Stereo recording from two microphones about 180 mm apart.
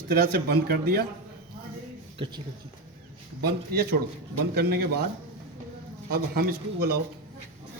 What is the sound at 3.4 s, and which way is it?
Speech, 60° right (ahead or behind).